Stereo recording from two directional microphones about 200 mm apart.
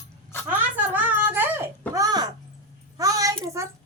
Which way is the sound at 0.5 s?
10° right (ahead or behind).